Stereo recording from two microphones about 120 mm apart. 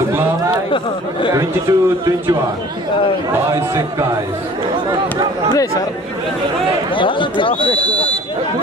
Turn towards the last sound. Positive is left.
turn(degrees=45)  # may be behind; listen again after turning